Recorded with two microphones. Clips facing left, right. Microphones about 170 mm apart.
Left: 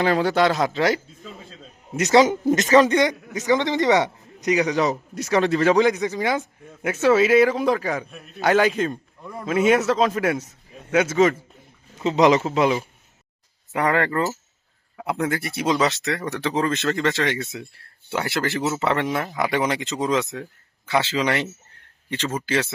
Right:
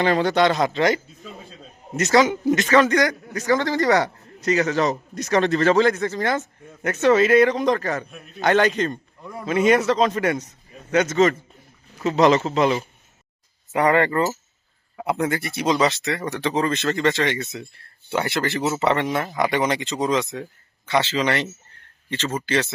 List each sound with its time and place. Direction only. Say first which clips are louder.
0.0 s speech: right 1 dB; 5° left (ahead or behind)
2.0 s a man's voice: left 2 dB; 15° left (ahead or behind)
2.2 s speech: left 1 dB; 40° left (ahead or behind)
2.6 s a man's voice: left 2 dB; 30° left (ahead or behind); by 11.3 s 10° left (ahead or behind)
11.9 s a man's voice: even; 20° left (ahead or behind)